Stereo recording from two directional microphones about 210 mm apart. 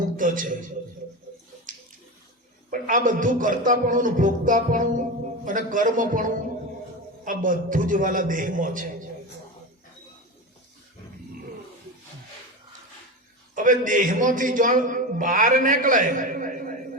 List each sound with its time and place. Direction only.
0.2 s a man's voice: 40° right (ahead or behind)
2.6 s a man's voice: 40° right (ahead or behind)
13.6 s a man's voice: 40° right (ahead or behind)